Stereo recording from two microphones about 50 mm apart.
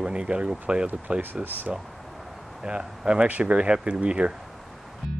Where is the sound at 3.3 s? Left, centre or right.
Right.